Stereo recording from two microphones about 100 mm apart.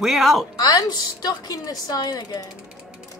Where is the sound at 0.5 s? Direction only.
40° left (ahead or behind).